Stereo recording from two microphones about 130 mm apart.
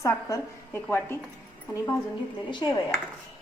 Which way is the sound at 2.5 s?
35° left (ahead or behind).